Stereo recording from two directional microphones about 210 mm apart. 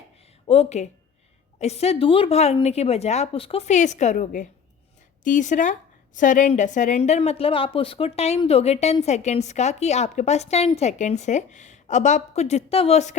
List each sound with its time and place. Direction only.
0.4 s a woman's voice: 30° left (ahead or behind)